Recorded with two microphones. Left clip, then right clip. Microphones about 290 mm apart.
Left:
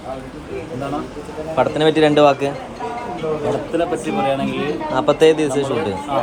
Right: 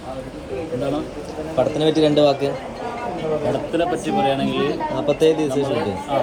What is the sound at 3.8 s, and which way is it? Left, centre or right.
Speech, left.